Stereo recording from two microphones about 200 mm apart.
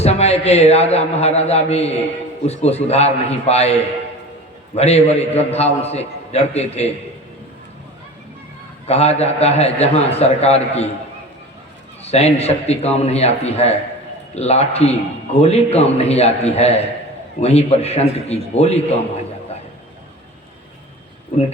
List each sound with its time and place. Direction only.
0.0 s a man's voice: 30° left (ahead or behind)
8.9 s a man's voice: 30° left (ahead or behind)
12.0 s a man's voice: 30° left (ahead or behind)